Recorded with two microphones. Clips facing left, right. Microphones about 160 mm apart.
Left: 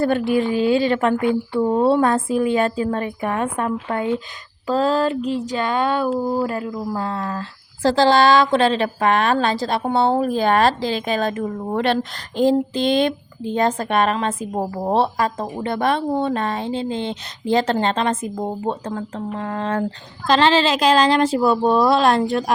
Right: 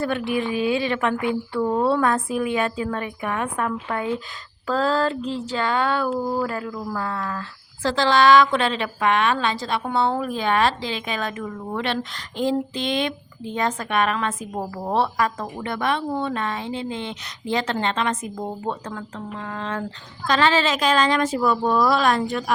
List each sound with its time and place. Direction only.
0.0 s speech: 35° left (ahead or behind)
1.5 s a woman's voice: 20° left (ahead or behind)
18.9 s speech: 40° left (ahead or behind)
20.2 s speech: 30° left (ahead or behind)